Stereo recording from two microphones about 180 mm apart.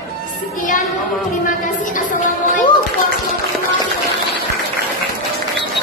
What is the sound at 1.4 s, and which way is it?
A woman's voice, 45° left (ahead or behind).